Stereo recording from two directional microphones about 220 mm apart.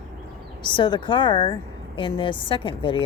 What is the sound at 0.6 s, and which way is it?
A woman's voice, 20° left (ahead or behind).